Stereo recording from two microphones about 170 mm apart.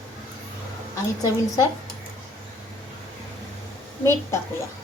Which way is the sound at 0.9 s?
20° left (ahead or behind).